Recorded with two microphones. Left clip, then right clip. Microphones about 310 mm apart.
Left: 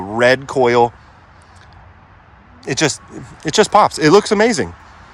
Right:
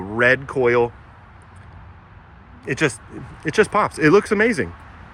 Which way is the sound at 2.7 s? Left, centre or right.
Centre.